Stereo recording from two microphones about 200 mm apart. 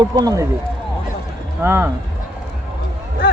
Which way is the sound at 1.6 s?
10° right (ahead or behind).